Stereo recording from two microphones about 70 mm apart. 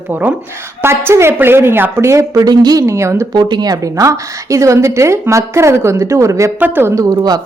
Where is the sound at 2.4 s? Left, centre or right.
Right.